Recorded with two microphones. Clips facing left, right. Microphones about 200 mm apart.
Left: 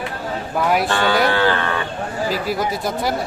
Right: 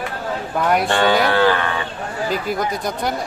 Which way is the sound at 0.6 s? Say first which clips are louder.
Even; 5° left (ahead or behind).